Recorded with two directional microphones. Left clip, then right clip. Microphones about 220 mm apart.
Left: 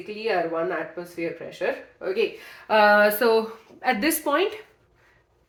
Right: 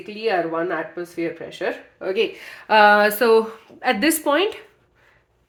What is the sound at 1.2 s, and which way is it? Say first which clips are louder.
A woman's voice: right 2 dB; 55° right (ahead or behind).